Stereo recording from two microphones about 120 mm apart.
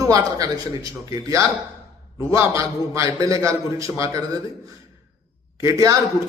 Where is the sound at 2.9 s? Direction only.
25° right (ahead or behind).